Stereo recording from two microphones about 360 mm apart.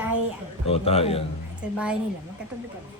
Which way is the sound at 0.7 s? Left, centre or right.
Centre.